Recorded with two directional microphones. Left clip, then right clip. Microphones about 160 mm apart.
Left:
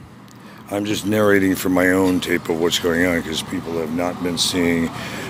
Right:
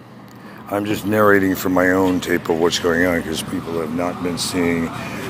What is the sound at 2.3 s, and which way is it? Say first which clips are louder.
Speech: right 2 dB; 20° left (ahead or behind).